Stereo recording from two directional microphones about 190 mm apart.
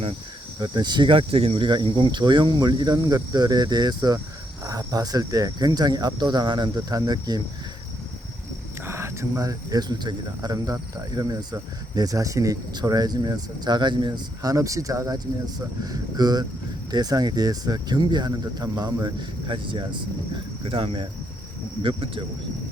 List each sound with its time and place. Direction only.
0.6 s speech: 20° right (ahead or behind)
8.8 s speech: 15° right (ahead or behind)